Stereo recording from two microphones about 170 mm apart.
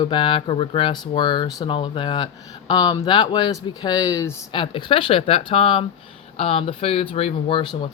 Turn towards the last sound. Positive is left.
turn(degrees=30)  # may be behind; listen again after turning